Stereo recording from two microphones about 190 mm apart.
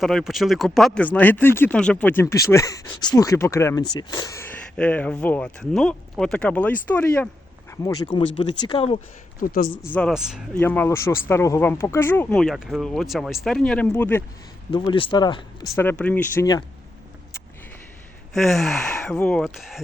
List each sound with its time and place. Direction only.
0.0 s speech: centre (ahead or behind)
7.7 s speech: 20° left (ahead or behind)
9.4 s speech: 45° left (ahead or behind)
9.9 s speech: centre (ahead or behind)
10.6 s speech: 10° left (ahead or behind)
14.7 s speech: 25° left (ahead or behind)
15.7 s speech: 10° left (ahead or behind)
18.3 s speech: centre (ahead or behind)